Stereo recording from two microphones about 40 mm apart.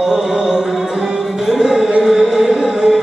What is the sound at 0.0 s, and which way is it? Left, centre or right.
Music, centre.